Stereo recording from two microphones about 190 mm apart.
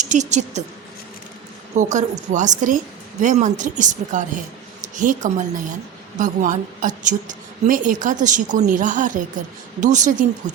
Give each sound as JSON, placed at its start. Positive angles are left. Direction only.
{"t": 0.0, "sound": "a woman's voice", "side_deg": -40}
{"t": 1.7, "sound": "a woman's voice", "side_deg": -40}